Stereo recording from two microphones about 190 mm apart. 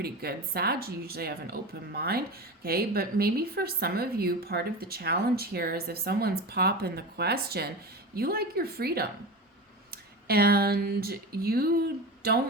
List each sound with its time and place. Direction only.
0.0 s a woman's voice: 55° right (ahead or behind)